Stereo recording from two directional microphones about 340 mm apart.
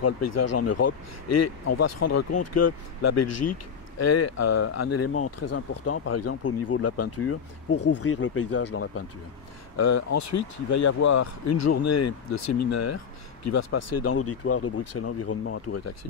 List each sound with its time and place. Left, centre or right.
0.0 s speech: left
9.8 s speech: left